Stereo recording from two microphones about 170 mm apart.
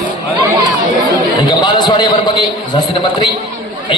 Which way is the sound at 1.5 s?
25° left (ahead or behind).